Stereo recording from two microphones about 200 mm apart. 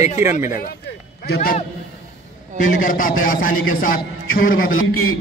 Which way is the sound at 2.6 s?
40° left (ahead or behind).